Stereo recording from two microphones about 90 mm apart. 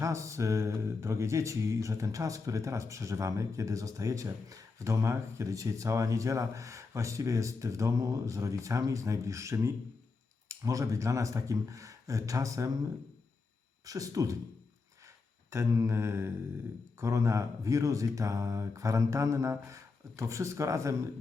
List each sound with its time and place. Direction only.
0.0 s speech: 35° right (ahead or behind)
13.8 s speech: 40° right (ahead or behind)
15.4 s speech: 30° right (ahead or behind)